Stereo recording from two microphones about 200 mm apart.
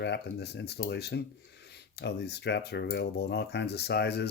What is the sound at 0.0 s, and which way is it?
Speech, 60° left (ahead or behind).